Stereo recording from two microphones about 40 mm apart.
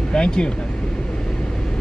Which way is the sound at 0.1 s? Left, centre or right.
Left.